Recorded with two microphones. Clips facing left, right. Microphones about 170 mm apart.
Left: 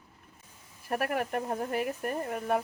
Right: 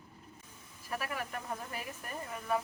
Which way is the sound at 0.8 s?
60° left (ahead or behind).